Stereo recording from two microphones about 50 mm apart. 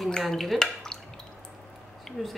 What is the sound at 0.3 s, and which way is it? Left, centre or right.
Speech, centre.